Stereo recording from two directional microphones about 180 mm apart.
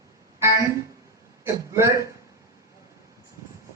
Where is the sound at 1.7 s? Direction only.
15° right (ahead or behind).